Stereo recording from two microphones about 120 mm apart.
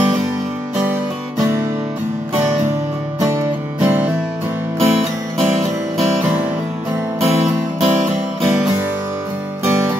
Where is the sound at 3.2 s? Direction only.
25° right (ahead or behind).